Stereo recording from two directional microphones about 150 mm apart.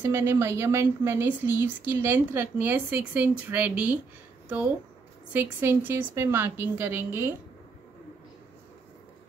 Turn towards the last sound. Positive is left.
turn(degrees=-15)  # may be behind; listen again after turning